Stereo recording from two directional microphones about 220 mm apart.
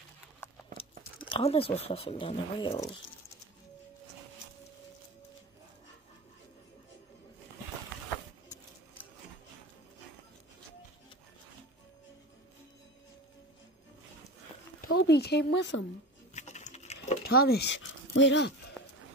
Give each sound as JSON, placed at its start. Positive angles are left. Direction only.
{"t": 1.3, "sound": "speech", "side_deg": 25}
{"t": 15.0, "sound": "a sound", "side_deg": 50}
{"t": 16.3, "sound": "patter", "side_deg": 30}
{"t": 17.2, "sound": "speech", "side_deg": 45}